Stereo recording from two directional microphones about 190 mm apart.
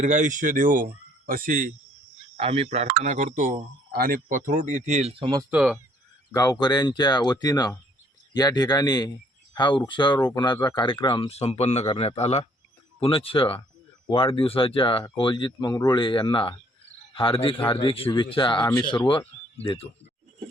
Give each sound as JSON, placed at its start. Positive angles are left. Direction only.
{"t": 0.0, "sound": "speech", "side_deg": -40}
{"t": 2.3, "sound": "speech", "side_deg": -30}
{"t": 5.2, "sound": "speech", "side_deg": -20}
{"t": 5.5, "sound": "speech", "side_deg": -5}
{"t": 6.3, "sound": "speech", "side_deg": 20}